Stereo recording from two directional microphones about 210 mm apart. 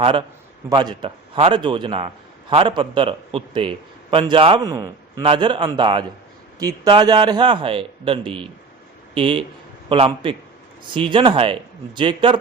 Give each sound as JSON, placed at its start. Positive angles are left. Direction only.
{"t": 0.0, "sound": "a man's voice", "side_deg": -25}